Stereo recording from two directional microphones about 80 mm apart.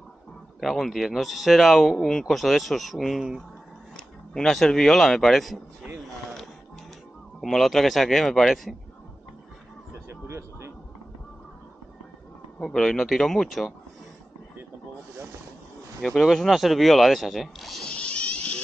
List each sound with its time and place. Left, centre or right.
0.6 s speech: centre
7.3 s speech: centre
10.0 s a sound: right
12.5 s speech: centre
16.0 s speech: centre
17.8 s vehicle: centre